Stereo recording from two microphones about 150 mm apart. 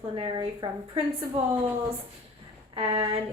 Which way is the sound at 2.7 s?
35° right (ahead or behind).